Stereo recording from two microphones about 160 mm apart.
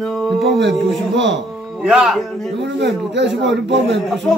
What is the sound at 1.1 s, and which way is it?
Speech, 90° right.